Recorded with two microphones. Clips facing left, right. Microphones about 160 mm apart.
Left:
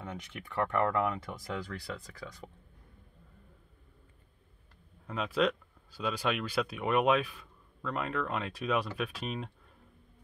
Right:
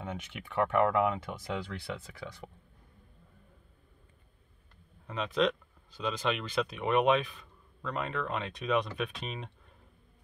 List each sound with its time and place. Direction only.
0.0 s speech: 20° right (ahead or behind)
5.0 s speech: 5° left (ahead or behind)